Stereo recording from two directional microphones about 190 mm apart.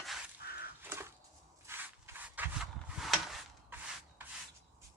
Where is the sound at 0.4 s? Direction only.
55° left (ahead or behind).